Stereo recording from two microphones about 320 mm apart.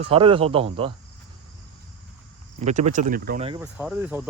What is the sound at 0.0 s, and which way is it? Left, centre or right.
Speech, centre.